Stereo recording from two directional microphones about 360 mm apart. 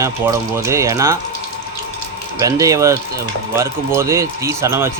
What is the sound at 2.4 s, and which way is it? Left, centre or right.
Speech, centre.